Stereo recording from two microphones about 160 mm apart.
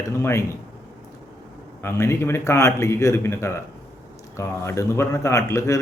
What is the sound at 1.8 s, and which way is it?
A man's voice, 15° left (ahead or behind).